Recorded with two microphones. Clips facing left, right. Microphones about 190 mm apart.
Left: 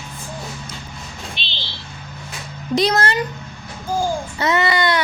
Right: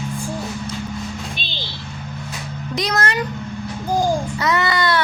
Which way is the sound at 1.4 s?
50° right (ahead or behind).